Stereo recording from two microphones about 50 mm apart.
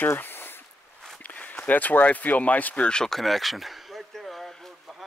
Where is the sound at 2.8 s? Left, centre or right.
Centre.